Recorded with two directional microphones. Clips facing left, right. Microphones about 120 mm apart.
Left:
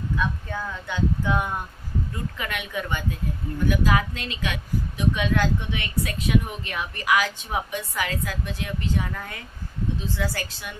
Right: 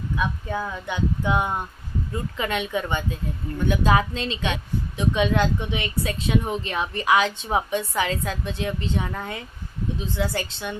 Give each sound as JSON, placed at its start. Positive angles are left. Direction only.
{"t": 0.2, "sound": "speech", "side_deg": -15}